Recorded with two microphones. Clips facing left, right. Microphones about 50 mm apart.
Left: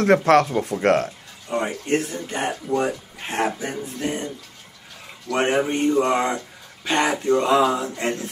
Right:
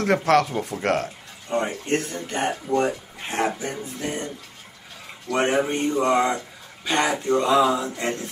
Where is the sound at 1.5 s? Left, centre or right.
Centre.